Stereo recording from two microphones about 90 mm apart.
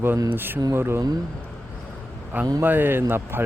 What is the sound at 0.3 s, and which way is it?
Speech, 25° right (ahead or behind).